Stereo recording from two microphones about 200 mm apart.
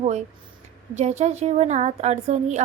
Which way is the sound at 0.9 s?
35° right (ahead or behind).